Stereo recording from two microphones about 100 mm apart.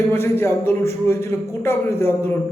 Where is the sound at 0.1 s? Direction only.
25° left (ahead or behind).